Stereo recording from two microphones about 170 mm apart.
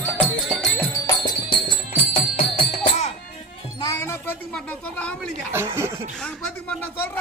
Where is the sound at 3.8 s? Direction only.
15° left (ahead or behind).